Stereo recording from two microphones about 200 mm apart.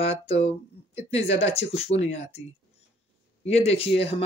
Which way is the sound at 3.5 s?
30° left (ahead or behind).